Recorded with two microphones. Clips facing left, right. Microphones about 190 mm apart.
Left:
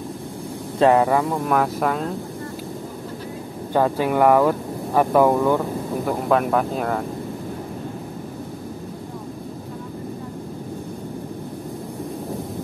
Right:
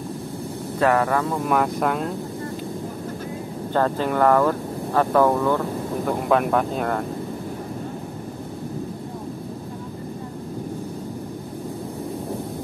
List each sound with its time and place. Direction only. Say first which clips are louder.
0.7 s speech: left 4 dB; 20° left (ahead or behind)
1.4 s speech: left 1 dB; centre (ahead or behind)
3.7 s speech: left 2 dB; 10° left (ahead or behind)
6.0 s speech: even; centre (ahead or behind)